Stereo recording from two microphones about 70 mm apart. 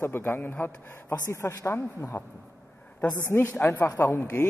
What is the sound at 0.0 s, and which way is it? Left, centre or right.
A man's voice, left.